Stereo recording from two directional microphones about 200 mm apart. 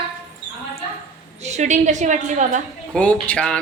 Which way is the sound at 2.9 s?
5° left (ahead or behind).